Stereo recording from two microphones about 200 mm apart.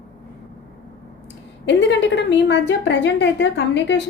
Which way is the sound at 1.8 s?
65° left (ahead or behind).